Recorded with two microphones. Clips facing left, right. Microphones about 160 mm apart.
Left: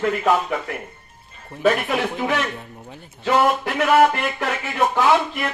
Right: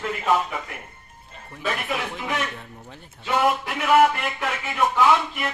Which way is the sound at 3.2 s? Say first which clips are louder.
Left 4 dB; 75° left (ahead or behind).